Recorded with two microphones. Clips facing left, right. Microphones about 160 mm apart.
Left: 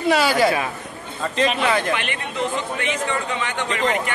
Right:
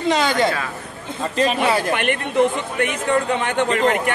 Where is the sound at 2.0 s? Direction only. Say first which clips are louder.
Right 8 dB; 55° right (ahead or behind).